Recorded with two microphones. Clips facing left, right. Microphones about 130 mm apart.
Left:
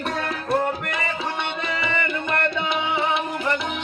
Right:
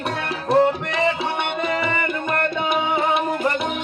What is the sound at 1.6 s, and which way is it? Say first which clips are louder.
Music: right 3 dB; 45° right (ahead or behind).